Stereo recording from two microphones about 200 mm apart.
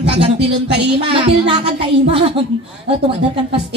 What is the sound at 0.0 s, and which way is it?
Speech, 30° right (ahead or behind).